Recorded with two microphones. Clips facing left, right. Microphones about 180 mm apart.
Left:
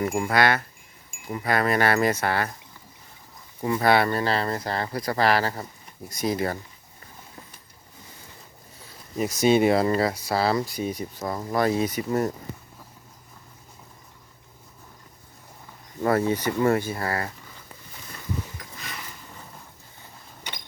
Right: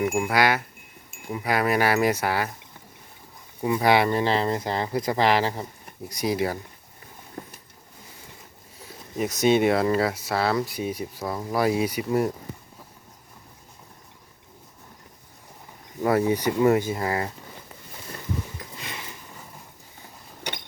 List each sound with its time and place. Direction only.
0.0 s speech: 10° right (ahead or behind)
3.6 s speech: 10° right (ahead or behind)
9.1 s speech: centre (ahead or behind)
16.0 s speech: 10° right (ahead or behind)
18.8 s a sound: 25° right (ahead or behind)